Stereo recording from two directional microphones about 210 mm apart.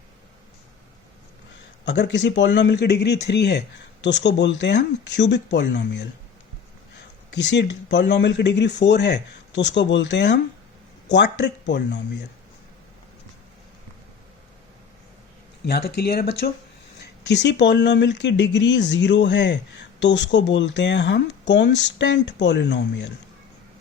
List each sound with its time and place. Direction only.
1.8 s speech: 55° left (ahead or behind)
7.3 s speech: 55° left (ahead or behind)
15.6 s speech: 50° left (ahead or behind)